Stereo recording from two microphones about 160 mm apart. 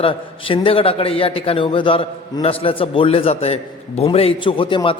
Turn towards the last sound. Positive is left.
turn(degrees=35)  # may be behind; listen again after turning